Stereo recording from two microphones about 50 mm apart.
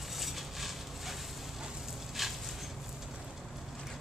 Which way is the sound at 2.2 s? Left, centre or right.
Centre.